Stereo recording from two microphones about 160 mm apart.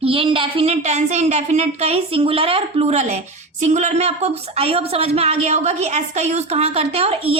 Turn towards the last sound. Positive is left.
turn(degrees=-35)  # may be behind; listen again after turning